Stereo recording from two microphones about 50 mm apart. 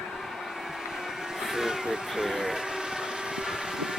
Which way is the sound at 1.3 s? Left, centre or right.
Centre.